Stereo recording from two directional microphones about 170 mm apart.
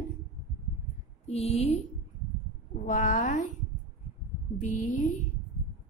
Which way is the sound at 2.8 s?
45° left (ahead or behind).